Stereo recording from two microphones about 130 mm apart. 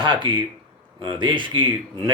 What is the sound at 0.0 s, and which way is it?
Speech, 35° right (ahead or behind).